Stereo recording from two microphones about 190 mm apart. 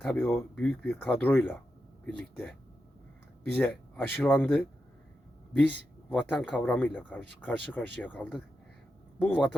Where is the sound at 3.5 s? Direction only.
10° left (ahead or behind).